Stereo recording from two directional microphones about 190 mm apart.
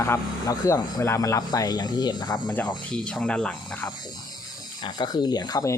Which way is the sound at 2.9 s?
5° left (ahead or behind).